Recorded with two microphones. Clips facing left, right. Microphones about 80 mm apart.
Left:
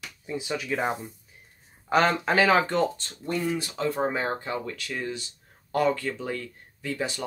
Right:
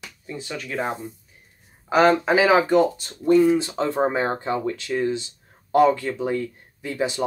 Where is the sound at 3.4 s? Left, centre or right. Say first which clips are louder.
Right 8 dB; right.